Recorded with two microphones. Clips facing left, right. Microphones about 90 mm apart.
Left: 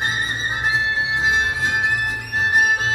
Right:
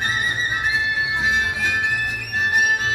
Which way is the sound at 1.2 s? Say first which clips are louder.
Left 2 dB; 30° left (ahead or behind).